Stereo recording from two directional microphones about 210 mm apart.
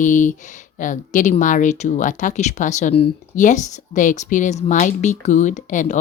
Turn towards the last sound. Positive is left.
turn(degrees=35)  # may be behind; listen again after turning